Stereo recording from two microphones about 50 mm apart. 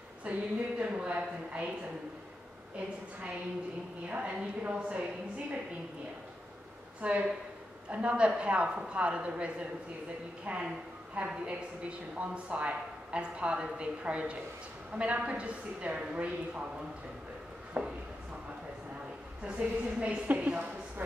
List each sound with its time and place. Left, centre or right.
0.2 s speech: right
4.1 s a woman's voice: right
7.0 s a woman's voice: right
17.8 s a woman's voice: right
19.4 s a woman's voice: right